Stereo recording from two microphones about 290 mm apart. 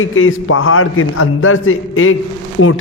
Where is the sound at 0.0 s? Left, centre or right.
Left.